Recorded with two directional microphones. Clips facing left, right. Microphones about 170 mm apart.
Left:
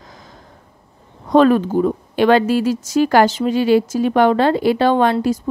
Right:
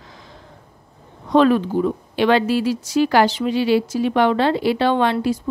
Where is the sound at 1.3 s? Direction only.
45° left (ahead or behind).